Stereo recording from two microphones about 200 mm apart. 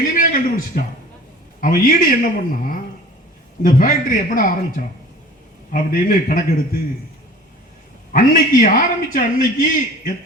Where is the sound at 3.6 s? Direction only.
45° left (ahead or behind).